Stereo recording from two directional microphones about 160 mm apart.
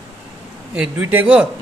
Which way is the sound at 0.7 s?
10° right (ahead or behind).